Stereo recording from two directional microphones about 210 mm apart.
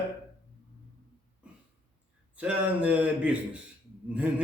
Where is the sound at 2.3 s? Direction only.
5° right (ahead or behind).